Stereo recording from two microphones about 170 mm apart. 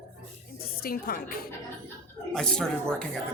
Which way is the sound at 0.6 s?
60° left (ahead or behind).